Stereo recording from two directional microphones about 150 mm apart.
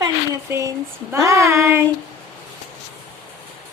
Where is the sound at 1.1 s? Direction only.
20° right (ahead or behind).